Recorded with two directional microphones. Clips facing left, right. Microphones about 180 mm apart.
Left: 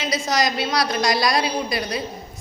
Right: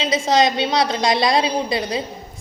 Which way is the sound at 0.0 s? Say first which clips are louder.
Right 5 dB; 25° right (ahead or behind).